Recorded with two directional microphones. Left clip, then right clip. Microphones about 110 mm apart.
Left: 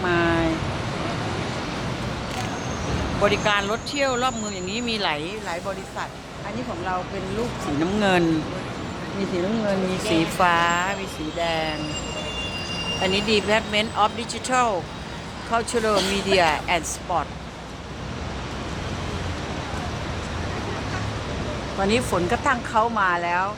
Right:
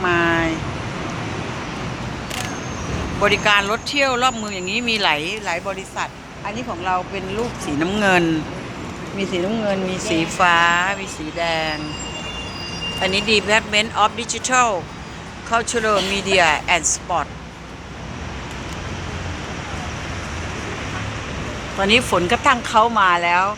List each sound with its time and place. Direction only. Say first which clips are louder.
0.0 s a sound: right 4 dB; 15° left (ahead or behind)
3.2 s speech: right 5 dB; centre (ahead or behind)
7.9 s speech: right 5 dB; centre (ahead or behind)
10.2 s speech: right 4 dB; 20° left (ahead or behind); by 11.8 s centre (ahead or behind)
13.0 s speech: right 4 dB; 10° left (ahead or behind)
21.8 s speech: right 6 dB; 10° right (ahead or behind)
22.3 s speech: right 7 dB; 20° right (ahead or behind)